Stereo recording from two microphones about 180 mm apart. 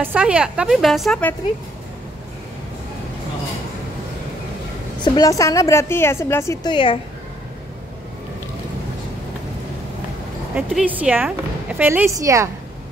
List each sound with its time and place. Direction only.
0.0 s a woman's voice: 10° right (ahead or behind)
5.0 s a woman's voice: 20° left (ahead or behind)
10.5 s speech: 5° right (ahead or behind)